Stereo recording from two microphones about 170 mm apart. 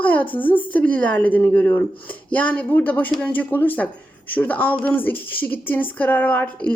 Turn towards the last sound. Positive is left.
turn(degrees=10)  # may be behind; listen again after turning